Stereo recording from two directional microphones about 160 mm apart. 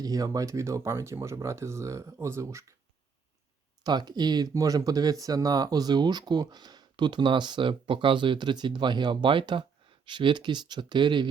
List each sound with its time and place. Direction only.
0.0 s speech: 25° right (ahead or behind)
3.8 s speech: 25° right (ahead or behind)